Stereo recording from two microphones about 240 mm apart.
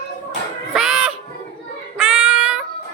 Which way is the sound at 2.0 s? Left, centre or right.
Centre.